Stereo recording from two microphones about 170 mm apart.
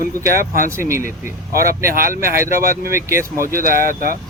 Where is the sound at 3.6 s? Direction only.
55° right (ahead or behind).